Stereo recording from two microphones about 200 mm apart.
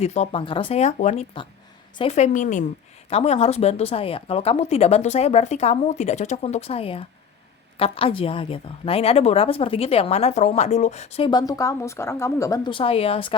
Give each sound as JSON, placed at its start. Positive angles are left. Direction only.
{"t": 0.0, "sound": "a woman's voice", "side_deg": 30}